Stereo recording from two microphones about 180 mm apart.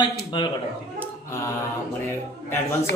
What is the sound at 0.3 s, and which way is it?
Speech, 25° left (ahead or behind).